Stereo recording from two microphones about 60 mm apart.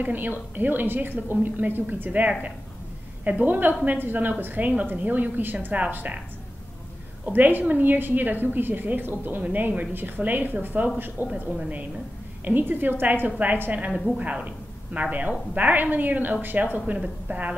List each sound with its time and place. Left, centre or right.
0.0 s a woman's voice: right
7.2 s a woman's voice: right
12.4 s a woman's voice: right